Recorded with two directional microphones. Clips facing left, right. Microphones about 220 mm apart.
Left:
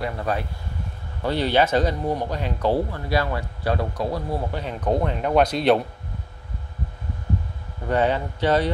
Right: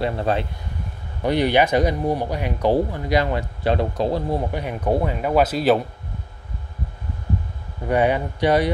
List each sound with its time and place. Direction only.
0.0 s speech: 25° right (ahead or behind)
1.2 s speech: 15° right (ahead or behind)
7.9 s speech: 15° right (ahead or behind)